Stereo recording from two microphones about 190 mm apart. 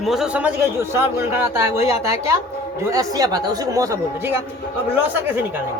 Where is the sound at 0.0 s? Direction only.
Centre (ahead or behind).